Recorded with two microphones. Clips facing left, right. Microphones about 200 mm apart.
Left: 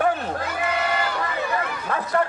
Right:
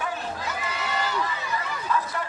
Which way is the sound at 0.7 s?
55° left (ahead or behind).